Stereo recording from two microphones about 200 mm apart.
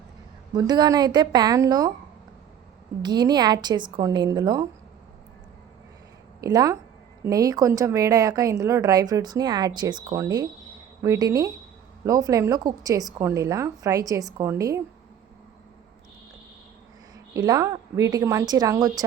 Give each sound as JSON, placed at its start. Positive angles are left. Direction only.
{"t": 0.5, "sound": "a woman's voice", "side_deg": -20}
{"t": 3.0, "sound": "a woman's voice", "side_deg": -20}
{"t": 6.4, "sound": "speech", "side_deg": -20}
{"t": 17.3, "sound": "a woman's voice", "side_deg": -20}